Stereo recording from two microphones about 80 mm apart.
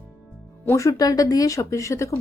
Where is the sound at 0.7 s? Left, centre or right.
Left.